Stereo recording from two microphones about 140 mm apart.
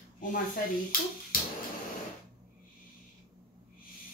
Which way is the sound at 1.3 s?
90° left.